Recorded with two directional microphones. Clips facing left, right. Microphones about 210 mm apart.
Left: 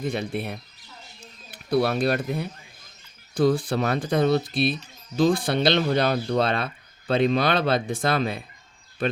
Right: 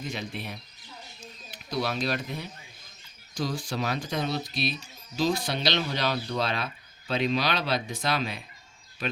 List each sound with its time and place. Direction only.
0.0 s speech: 55° left (ahead or behind)